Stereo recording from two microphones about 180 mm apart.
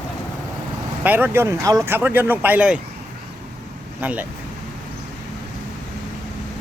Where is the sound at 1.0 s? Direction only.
10° right (ahead or behind).